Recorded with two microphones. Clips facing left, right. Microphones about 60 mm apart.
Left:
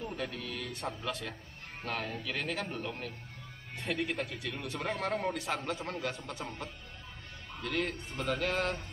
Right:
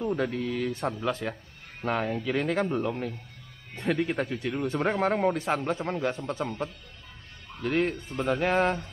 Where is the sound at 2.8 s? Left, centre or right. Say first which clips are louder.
Right 9 dB; right.